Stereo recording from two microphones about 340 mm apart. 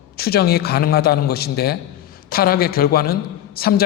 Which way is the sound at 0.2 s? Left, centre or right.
Left.